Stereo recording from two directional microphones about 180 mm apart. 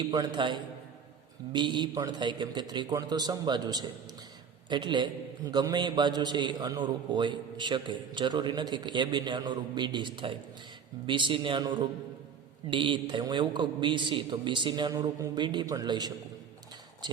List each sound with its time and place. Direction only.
0.0 s a man's voice: 25° right (ahead or behind)